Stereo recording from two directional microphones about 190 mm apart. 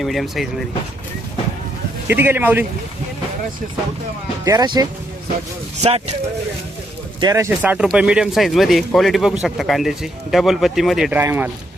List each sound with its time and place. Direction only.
0.0 s speech: centre (ahead or behind)
2.0 s a man's voice: 10° right (ahead or behind)
4.4 s speech: 20° right (ahead or behind)
5.8 s speech: 35° right (ahead or behind)
7.2 s a man's voice: 15° right (ahead or behind)